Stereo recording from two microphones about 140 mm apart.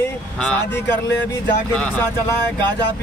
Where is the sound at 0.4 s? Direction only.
5° left (ahead or behind).